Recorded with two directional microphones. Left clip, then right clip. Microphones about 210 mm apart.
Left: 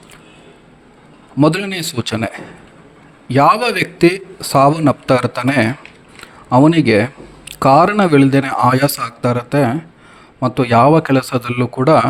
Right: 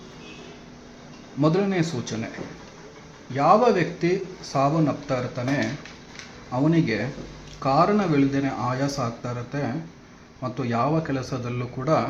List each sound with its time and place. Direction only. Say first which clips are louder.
1.4 s a man's voice: left 7 dB; 50° left (ahead or behind)
3.3 s a man's voice: left 6 dB; 55° left (ahead or behind)